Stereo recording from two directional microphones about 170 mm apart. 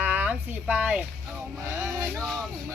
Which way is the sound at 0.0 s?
10° right (ahead or behind).